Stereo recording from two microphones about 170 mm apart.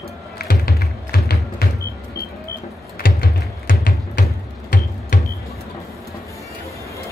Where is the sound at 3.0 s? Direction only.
55° left (ahead or behind).